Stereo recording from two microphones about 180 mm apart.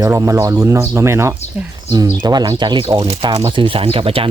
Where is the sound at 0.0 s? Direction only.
15° right (ahead or behind).